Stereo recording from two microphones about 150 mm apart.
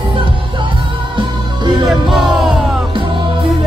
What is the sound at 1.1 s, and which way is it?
Music, 30° right (ahead or behind).